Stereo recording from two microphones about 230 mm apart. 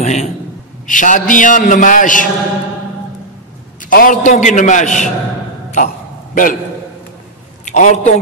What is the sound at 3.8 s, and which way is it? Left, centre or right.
A man's voice, left.